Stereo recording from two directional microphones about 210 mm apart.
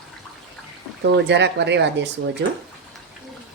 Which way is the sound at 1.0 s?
55° right (ahead or behind).